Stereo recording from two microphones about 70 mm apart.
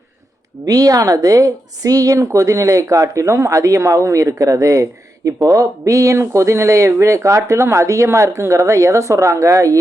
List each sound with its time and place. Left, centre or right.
0.6 s a woman's voice: right